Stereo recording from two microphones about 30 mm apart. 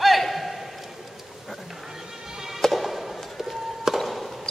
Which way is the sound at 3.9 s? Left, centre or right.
Centre.